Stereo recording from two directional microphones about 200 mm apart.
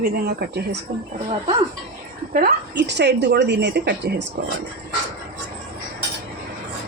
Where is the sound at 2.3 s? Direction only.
50° right (ahead or behind).